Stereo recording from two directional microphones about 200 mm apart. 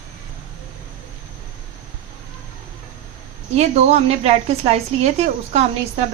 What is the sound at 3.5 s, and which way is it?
A woman's voice, 35° right (ahead or behind).